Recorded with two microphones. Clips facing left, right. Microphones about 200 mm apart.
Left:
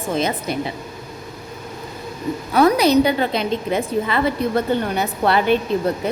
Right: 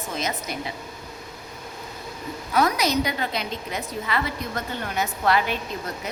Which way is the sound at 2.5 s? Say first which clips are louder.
Left 8 dB; 30° left (ahead or behind).